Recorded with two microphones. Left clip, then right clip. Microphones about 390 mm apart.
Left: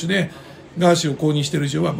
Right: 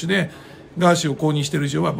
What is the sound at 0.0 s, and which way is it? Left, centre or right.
Speech, centre.